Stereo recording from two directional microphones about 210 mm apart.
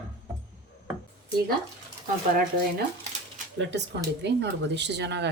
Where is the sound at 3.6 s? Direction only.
55° right (ahead or behind).